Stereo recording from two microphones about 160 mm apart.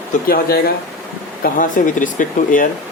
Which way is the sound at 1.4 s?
55° left (ahead or behind).